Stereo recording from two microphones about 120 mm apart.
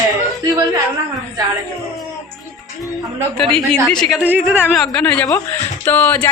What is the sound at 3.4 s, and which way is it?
Speech, centre (ahead or behind).